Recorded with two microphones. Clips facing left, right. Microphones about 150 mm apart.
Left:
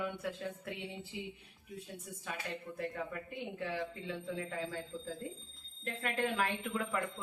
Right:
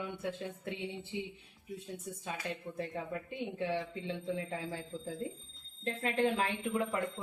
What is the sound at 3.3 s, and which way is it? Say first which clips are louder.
Speech: right 8 dB; 25° right (ahead or behind).